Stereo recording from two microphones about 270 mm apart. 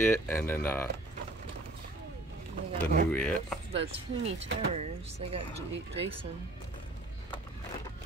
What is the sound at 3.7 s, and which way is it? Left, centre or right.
Speech, right.